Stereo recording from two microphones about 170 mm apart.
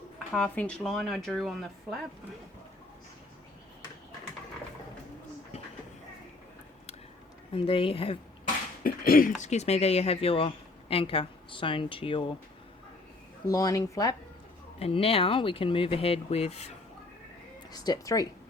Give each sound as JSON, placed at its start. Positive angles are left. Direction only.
{"t": 0.3, "sound": "speech", "side_deg": 10}
{"t": 7.5, "sound": "a woman's voice", "side_deg": 30}
{"t": 8.8, "sound": "a sound", "side_deg": 55}
{"t": 9.4, "sound": "a woman's voice", "side_deg": 40}
{"t": 13.5, "sound": "speech", "side_deg": 20}
{"t": 14.8, "sound": "a woman's voice", "side_deg": 35}
{"t": 17.7, "sound": "speech", "side_deg": 25}